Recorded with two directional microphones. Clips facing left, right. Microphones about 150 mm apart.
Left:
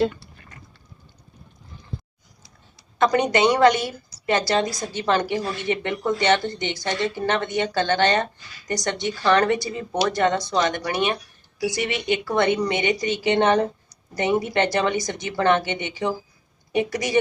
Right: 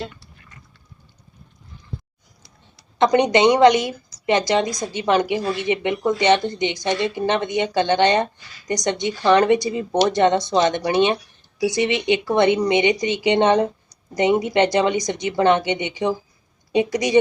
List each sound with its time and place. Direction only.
3.0 s a woman's voice: 20° right (ahead or behind)